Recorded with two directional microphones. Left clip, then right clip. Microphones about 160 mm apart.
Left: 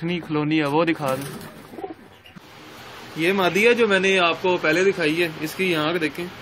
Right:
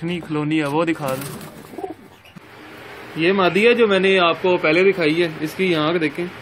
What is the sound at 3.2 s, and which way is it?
Speech, 25° right (ahead or behind).